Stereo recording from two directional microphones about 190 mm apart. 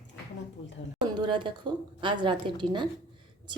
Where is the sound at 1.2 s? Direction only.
25° right (ahead or behind).